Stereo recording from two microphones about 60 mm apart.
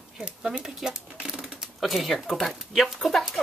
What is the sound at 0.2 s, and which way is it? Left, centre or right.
Speech, centre.